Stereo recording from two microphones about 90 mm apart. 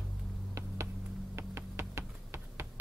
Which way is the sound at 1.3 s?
30° right (ahead or behind).